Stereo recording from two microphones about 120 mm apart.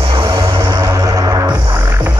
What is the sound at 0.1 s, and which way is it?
Music, 50° right (ahead or behind).